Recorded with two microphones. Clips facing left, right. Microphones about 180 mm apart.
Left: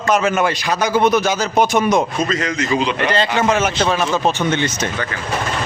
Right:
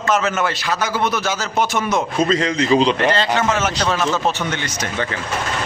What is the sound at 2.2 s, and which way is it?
Speech, 30° right (ahead or behind).